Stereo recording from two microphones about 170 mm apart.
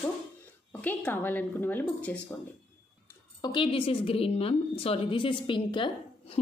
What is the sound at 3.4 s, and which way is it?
A woman's voice, 30° left (ahead or behind).